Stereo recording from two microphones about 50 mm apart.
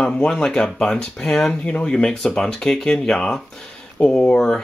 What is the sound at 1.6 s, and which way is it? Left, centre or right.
Speech, left.